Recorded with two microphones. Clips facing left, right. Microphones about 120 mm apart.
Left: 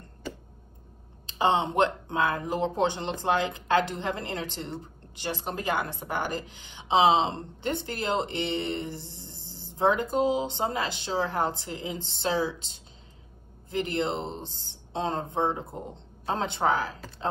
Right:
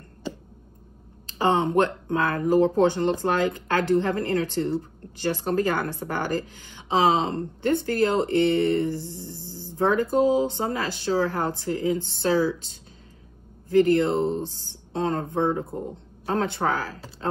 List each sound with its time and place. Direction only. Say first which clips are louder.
1.2 s a woman's voice: right 2 dB; 20° left (ahead or behind)
13.9 s a woman's voice: right 7 dB; 25° left (ahead or behind)